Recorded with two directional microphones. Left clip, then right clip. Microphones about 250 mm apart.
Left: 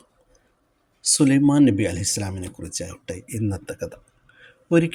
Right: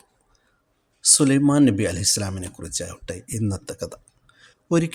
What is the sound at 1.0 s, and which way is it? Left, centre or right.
Speech, centre.